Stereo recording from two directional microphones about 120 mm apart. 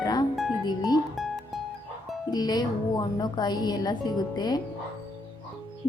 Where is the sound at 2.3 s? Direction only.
35° left (ahead or behind).